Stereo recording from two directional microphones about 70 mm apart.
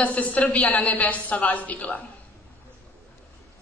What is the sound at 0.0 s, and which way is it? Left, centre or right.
A woman's voice, left.